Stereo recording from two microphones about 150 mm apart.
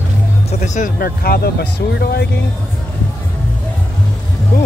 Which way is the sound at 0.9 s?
90° left.